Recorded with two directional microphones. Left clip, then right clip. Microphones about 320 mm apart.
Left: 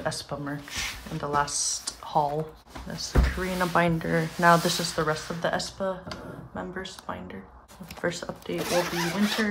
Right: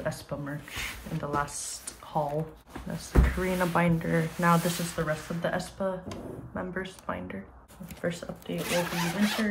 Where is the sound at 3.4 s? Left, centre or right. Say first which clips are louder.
Left 3 dB; centre.